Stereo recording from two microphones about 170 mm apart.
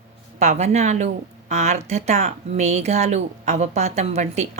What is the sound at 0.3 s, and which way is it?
A woman's voice, 40° right (ahead or behind).